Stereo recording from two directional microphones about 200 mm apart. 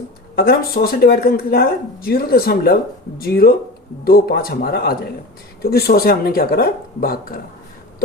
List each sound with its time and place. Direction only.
0.3 s speech: 50° left (ahead or behind)